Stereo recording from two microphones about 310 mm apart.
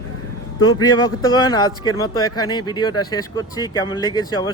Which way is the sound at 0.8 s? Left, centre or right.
Centre.